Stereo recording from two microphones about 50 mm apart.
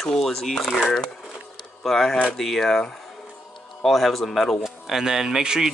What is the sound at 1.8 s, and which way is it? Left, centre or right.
Speech, centre.